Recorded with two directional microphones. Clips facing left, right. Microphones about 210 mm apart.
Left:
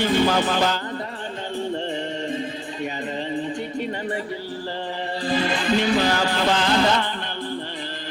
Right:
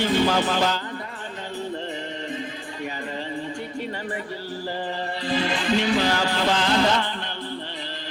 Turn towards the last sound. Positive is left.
turn(degrees=50)  # may be behind; listen again after turning